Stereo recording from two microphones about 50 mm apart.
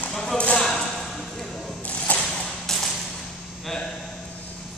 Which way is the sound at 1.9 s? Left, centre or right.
Left.